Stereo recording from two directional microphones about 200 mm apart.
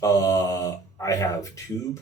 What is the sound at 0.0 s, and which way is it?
Speech, 15° left (ahead or behind).